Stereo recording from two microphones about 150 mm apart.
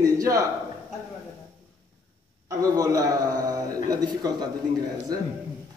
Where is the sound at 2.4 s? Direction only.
20° right (ahead or behind).